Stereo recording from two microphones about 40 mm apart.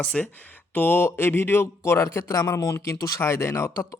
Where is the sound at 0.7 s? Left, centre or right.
Left.